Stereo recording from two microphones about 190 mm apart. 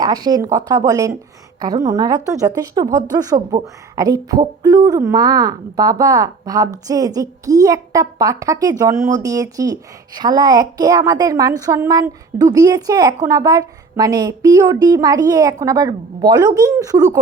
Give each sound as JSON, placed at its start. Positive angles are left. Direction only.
{"t": 0.0, "sound": "a woman's voice", "side_deg": -20}